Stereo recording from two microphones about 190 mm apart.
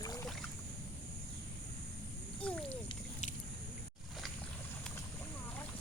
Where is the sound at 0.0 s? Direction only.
20° left (ahead or behind).